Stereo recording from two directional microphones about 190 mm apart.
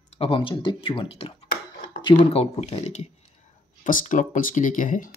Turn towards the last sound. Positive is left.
turn(degrees=45)  # may be behind; listen again after turning